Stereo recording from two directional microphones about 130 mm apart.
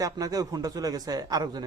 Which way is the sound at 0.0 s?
25° right (ahead or behind).